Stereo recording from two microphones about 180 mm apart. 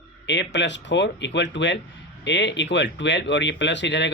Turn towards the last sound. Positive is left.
turn(degrees=75)  # may be behind; listen again after turning